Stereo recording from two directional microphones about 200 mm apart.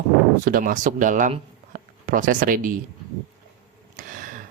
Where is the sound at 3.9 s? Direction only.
45° right (ahead or behind).